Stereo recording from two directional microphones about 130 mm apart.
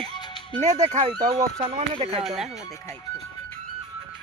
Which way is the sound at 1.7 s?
45° right (ahead or behind).